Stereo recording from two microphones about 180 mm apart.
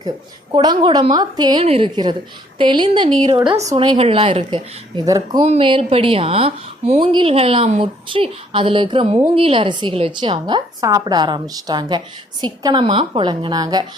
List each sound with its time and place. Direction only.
0.5 s a woman's voice: 25° right (ahead or behind)
5.0 s a woman's voice: 20° right (ahead or behind)